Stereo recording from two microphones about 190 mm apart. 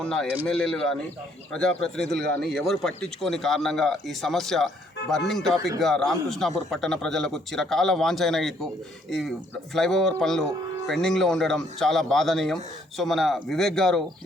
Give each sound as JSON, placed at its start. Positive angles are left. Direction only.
{"t": 0.0, "sound": "a man's voice", "side_deg": 5}